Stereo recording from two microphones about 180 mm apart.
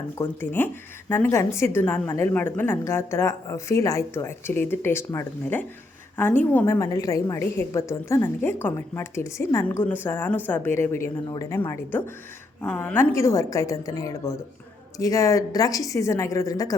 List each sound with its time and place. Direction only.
0.2 s a woman's voice: 10° left (ahead or behind)